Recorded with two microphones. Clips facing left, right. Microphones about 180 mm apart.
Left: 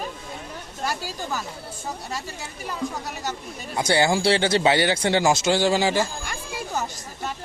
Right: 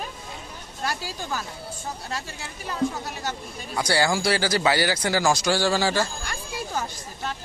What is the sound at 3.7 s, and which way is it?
Speech, 20° left (ahead or behind).